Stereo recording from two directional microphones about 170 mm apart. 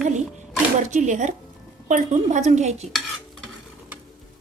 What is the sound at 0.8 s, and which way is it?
A woman's voice, 45° right (ahead or behind).